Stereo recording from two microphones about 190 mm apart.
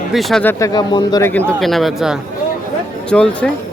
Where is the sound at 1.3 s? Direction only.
5° left (ahead or behind).